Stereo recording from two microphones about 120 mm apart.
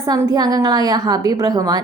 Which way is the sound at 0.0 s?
25° right (ahead or behind).